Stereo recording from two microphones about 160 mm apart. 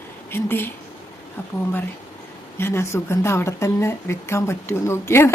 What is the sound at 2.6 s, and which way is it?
Speech, 15° left (ahead or behind).